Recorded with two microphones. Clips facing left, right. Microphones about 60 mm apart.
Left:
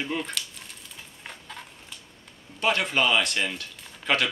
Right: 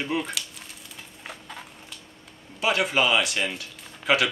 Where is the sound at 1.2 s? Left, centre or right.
Centre.